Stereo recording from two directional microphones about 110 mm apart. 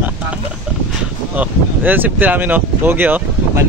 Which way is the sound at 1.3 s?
15° right (ahead or behind).